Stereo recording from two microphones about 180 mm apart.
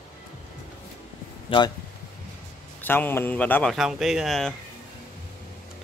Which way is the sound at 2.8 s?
10° left (ahead or behind).